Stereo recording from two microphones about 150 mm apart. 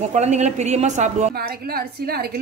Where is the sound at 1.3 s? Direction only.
90° right.